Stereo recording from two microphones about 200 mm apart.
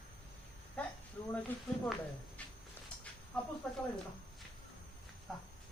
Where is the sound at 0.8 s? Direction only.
5° left (ahead or behind).